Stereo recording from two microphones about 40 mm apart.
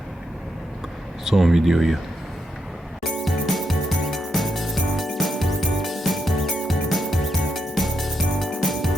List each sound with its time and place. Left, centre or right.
1.2 s speech: centre
3.0 s jingle: centre